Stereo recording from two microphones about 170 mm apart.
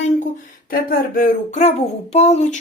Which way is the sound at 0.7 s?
55° left (ahead or behind).